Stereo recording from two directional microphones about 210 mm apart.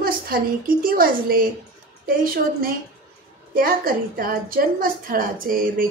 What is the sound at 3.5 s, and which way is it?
A woman's voice, 45° right (ahead or behind).